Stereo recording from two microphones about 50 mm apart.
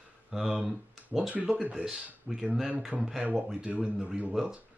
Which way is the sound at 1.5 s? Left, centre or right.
Right.